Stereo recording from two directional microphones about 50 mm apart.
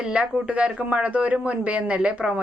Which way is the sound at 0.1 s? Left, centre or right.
Right.